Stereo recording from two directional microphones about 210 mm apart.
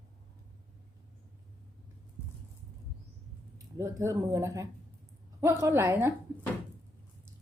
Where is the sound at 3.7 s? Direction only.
15° right (ahead or behind).